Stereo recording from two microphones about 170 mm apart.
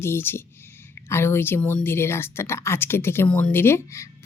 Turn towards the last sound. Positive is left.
turn(degrees=15)  # may be behind; listen again after turning